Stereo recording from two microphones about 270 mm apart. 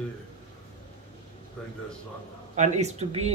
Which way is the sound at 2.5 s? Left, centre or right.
Right.